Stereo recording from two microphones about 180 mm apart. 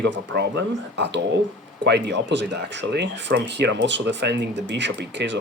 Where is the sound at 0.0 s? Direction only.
75° right (ahead or behind).